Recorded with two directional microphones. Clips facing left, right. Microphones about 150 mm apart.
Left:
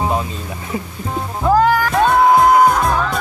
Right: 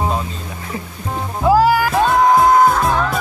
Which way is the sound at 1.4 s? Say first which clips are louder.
Right 1 dB; 5° right (ahead or behind).